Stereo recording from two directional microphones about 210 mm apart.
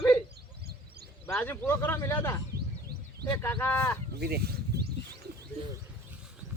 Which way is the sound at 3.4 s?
10° left (ahead or behind).